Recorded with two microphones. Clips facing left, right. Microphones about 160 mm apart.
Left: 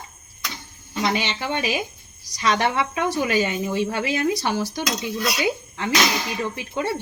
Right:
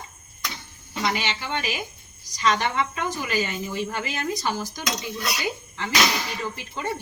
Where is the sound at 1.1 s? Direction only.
65° left (ahead or behind).